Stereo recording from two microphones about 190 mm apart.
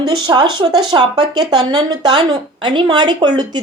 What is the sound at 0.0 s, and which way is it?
A woman's voice, 20° right (ahead or behind).